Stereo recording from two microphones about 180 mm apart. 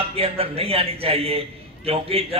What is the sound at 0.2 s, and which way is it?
A man's voice, 35° right (ahead or behind).